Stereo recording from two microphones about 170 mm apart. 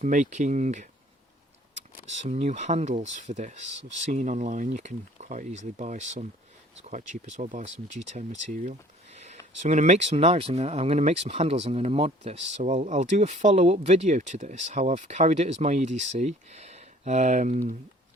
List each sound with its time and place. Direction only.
0.0 s speech: 45° right (ahead or behind)
2.0 s speech: 40° right (ahead or behind)
9.1 s a sound: 40° right (ahead or behind)
9.6 s speech: 45° right (ahead or behind)